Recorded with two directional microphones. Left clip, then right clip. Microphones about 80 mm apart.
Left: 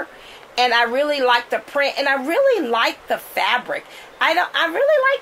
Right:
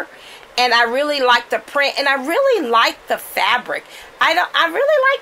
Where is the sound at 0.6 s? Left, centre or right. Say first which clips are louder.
Right 2 dB; right.